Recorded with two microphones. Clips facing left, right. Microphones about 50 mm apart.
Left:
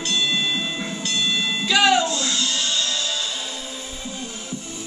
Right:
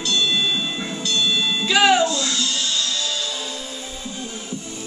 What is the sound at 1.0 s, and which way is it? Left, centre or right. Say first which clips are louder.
Music: right 3 dB; left.